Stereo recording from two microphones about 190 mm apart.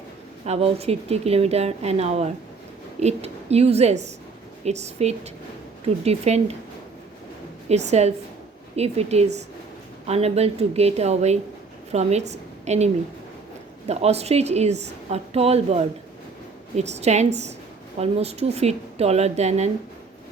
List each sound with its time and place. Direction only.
0.4 s a woman's voice: 35° right (ahead or behind)
7.7 s a woman's voice: 35° right (ahead or behind)